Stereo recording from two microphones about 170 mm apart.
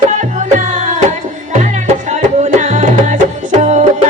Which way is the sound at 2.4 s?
45° right (ahead or behind).